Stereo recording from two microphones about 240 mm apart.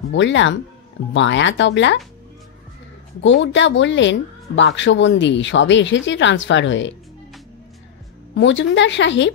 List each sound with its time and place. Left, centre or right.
0.1 s a woman's voice: left
3.2 s a woman's voice: left
8.4 s a woman's voice: left